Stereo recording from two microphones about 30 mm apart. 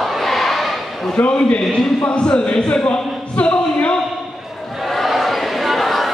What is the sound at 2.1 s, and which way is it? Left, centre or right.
Speech, left.